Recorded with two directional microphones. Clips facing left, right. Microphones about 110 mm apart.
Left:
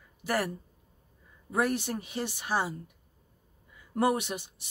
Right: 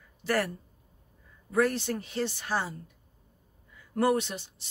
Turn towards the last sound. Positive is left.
turn(degrees=15)  # may be behind; listen again after turning